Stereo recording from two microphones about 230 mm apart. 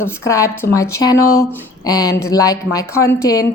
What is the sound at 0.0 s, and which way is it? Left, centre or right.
Speech, centre.